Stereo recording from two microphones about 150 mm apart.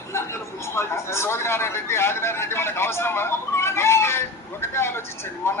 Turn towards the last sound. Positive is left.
turn(degrees=15)  # may be behind; listen again after turning